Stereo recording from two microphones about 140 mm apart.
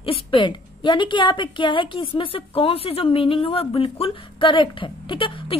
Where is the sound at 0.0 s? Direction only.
40° left (ahead or behind).